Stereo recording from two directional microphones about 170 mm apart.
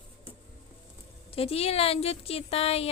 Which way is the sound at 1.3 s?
35° left (ahead or behind).